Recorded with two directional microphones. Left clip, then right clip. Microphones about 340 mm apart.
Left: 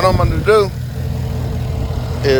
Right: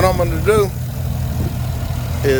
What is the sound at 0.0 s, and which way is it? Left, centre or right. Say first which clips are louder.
Speech: left 1 dB; centre.